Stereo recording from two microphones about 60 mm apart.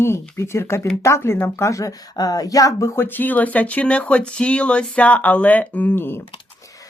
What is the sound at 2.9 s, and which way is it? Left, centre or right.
Speech, left.